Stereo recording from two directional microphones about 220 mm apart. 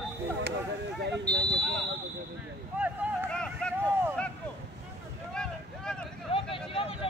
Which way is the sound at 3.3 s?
5° left (ahead or behind).